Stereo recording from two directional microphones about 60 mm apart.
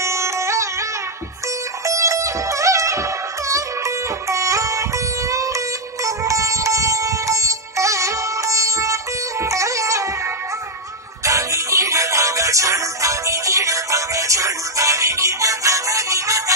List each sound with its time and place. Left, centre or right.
0.0 s music: right
1.9 s music: right